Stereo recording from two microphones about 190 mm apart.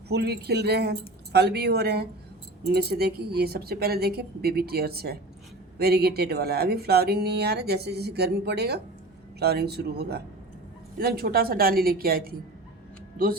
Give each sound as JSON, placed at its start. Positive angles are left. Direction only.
{"t": 0.1, "sound": "speech", "side_deg": -60}